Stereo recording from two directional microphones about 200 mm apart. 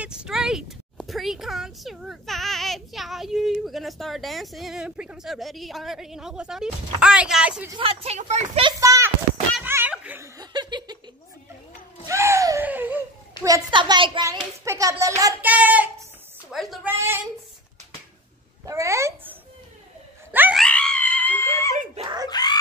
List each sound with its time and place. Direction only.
0.0 s speech: 5° right (ahead or behind)
7.7 s speech: 30° right (ahead or behind)
8.6 s a child's voice: 15° right (ahead or behind)
9.6 s laughter: 10° right (ahead or behind)
12.1 s a sound: 15° right (ahead or behind)
13.7 s a child's voice: 25° right (ahead or behind); by 16.9 s centre (ahead or behind)
16.9 s a child's voice: 10° right (ahead or behind)
18.7 s a child's voice: 15° right (ahead or behind)
20.3 s screaming: 10° right (ahead or behind)
20.6 s screaming: 5° left (ahead or behind)
22.0 s screaming: 20° right (ahead or behind)
22.3 s a sound: 20° left (ahead or behind)